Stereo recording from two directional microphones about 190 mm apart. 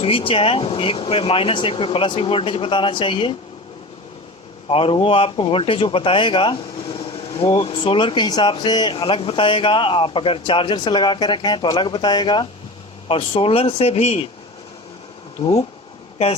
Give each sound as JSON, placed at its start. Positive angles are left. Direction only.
{"t": 0.0, "sound": "speech", "side_deg": 30}
{"t": 4.7, "sound": "speech", "side_deg": 30}
{"t": 15.4, "sound": "speech", "side_deg": 35}